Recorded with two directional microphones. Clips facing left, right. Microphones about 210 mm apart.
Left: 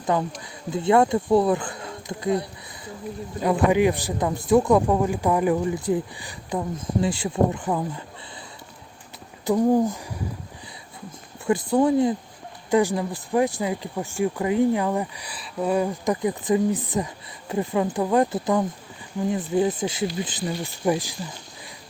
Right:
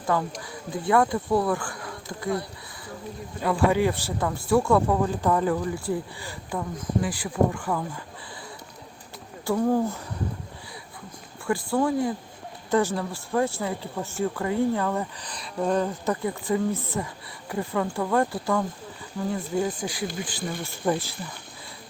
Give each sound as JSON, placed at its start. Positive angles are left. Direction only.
{"t": 0.0, "sound": "speech", "side_deg": 20}
{"t": 3.4, "sound": "speech", "side_deg": 20}
{"t": 9.5, "sound": "speech", "side_deg": 15}
{"t": 11.4, "sound": "speech", "side_deg": 20}